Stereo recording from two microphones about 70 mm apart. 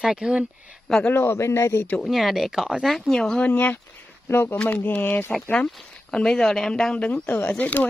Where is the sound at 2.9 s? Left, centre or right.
Centre.